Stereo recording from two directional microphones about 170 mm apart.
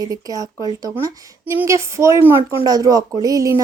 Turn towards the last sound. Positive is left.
turn(degrees=-20)  # may be behind; listen again after turning